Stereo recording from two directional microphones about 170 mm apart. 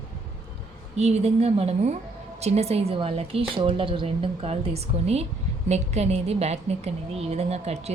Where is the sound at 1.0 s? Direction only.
40° right (ahead or behind).